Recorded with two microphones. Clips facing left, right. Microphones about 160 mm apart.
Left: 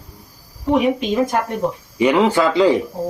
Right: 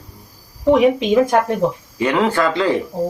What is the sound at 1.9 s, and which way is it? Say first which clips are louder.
Speech: left 5 dB; 15° left (ahead or behind).